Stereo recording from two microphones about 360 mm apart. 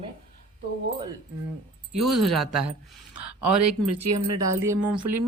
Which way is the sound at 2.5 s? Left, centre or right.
Right.